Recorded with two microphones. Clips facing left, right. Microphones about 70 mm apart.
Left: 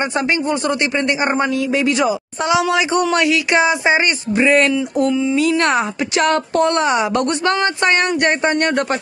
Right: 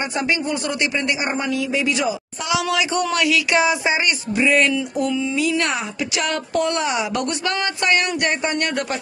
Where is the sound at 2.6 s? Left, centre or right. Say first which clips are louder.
Left 5 dB; left.